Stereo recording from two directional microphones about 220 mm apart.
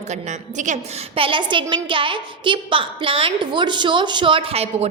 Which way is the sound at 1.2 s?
25° right (ahead or behind).